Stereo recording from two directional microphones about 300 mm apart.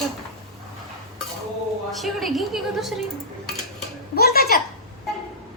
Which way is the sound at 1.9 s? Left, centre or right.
Centre.